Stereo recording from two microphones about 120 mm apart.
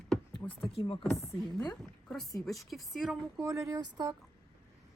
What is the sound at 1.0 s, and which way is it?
Speech, centre (ahead or behind).